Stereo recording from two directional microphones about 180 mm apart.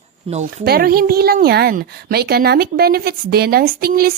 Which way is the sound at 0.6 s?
60° right (ahead or behind).